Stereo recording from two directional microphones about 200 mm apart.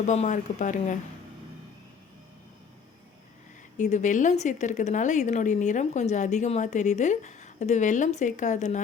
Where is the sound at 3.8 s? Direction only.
35° left (ahead or behind).